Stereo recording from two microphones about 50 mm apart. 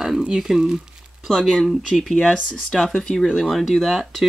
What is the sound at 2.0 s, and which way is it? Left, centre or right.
Speech, centre.